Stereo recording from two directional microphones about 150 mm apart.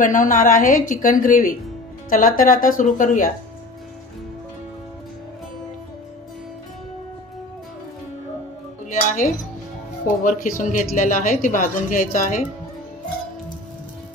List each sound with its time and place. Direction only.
0.0 s speech: 60° left (ahead or behind)
10.0 s speech: 60° left (ahead or behind)